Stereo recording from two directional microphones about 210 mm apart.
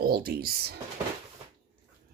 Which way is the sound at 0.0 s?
45° right (ahead or behind).